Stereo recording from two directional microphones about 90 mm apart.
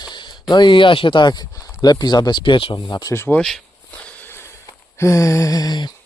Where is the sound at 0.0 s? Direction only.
60° left (ahead or behind).